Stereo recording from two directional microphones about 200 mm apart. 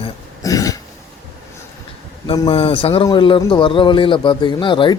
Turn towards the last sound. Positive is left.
turn(degrees=25)  # may be behind; listen again after turning